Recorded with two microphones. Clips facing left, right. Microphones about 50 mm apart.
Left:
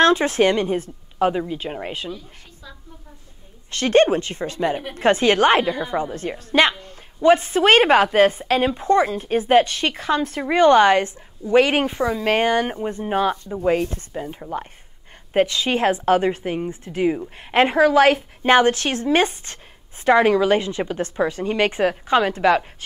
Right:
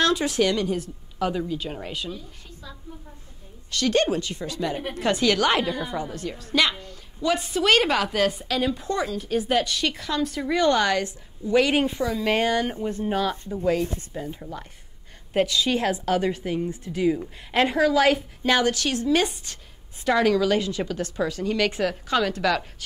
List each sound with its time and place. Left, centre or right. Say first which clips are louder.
0.0 s a woman's voice: left 6 dB; left
3.7 s a woman's voice: left 6 dB; left